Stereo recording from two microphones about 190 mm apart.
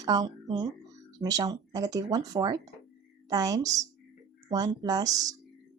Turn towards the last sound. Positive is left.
turn(degrees=-20)  # may be behind; listen again after turning